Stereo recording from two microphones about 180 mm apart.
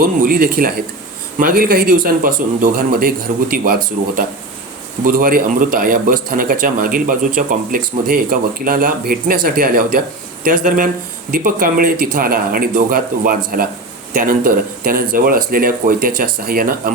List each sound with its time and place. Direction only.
0.2 s speech: 55° right (ahead or behind)
5.0 s speech: 50° right (ahead or behind)